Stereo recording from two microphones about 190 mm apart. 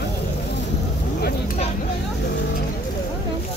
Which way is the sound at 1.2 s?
55° left (ahead or behind).